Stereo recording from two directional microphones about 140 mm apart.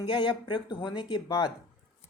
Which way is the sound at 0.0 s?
35° left (ahead or behind).